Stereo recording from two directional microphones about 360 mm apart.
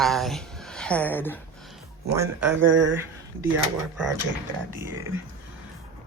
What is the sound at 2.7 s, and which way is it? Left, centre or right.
Speech, right.